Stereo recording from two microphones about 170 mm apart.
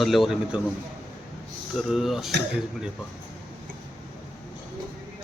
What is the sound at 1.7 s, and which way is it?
Speech, centre (ahead or behind).